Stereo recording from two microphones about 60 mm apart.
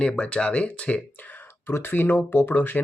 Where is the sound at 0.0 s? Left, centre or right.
Centre.